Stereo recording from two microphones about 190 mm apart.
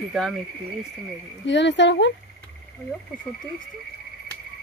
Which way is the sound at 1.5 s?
70° left (ahead or behind).